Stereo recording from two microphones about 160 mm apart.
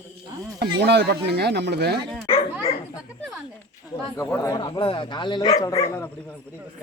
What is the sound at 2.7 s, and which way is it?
Speech, 40° left (ahead or behind).